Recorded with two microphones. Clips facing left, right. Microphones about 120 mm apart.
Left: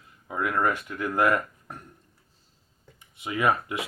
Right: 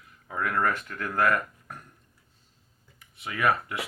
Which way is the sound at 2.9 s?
20° left (ahead or behind).